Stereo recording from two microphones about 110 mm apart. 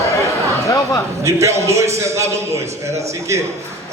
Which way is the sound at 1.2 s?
25° right (ahead or behind).